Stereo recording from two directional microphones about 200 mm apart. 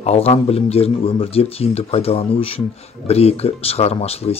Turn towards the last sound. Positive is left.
turn(degrees=30)  # may be behind; listen again after turning